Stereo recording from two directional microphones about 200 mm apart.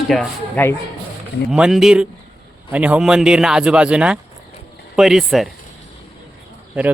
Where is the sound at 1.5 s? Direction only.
5° right (ahead or behind).